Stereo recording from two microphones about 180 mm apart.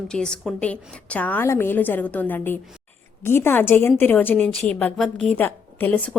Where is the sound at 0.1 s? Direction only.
5° left (ahead or behind).